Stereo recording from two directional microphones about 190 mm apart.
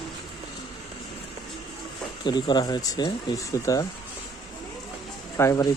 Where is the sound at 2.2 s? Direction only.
20° left (ahead or behind).